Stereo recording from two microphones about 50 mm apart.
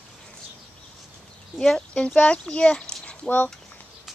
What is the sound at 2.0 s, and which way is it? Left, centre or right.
Speech, left.